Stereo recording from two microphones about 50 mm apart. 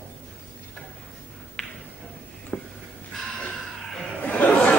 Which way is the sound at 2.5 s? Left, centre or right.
Left.